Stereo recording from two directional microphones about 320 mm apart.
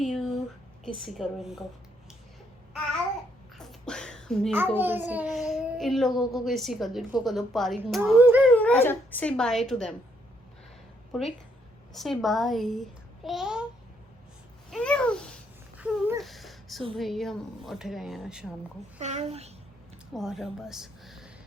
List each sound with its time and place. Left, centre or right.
0.0 s a sound: centre
1.0 s a child's voice: centre
3.6 s a sound: centre
4.8 s a child's voice: centre
8.5 s a child's voice: centre
11.9 s a child's voice: centre
14.7 s babbling: centre
15.8 s a sound: centre
17.0 s a child's voice: centre
18.9 s a child's voice: right
20.1 s a woman's voice: centre